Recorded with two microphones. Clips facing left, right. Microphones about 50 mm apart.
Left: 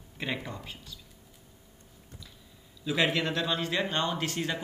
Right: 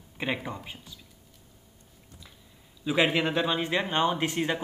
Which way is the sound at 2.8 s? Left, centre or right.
Centre.